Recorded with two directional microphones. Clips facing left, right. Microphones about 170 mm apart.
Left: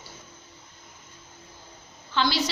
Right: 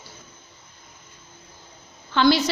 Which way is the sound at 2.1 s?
55° right (ahead or behind).